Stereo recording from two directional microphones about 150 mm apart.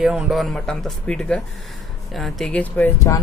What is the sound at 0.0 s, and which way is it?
Speech, 5° right (ahead or behind).